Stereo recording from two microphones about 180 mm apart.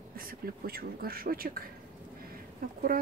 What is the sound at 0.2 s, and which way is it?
Speech, 55° right (ahead or behind).